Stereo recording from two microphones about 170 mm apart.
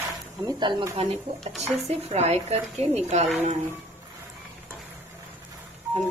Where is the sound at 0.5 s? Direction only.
25° right (ahead or behind); by 3.3 s 45° right (ahead or behind).